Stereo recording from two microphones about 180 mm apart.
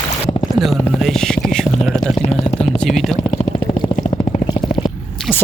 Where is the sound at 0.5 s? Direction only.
Centre (ahead or behind).